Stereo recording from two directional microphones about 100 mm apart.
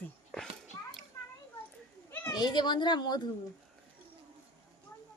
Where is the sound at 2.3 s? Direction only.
50° left (ahead or behind).